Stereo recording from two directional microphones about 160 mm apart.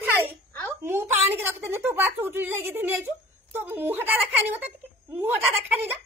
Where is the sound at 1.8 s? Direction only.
10° right (ahead or behind).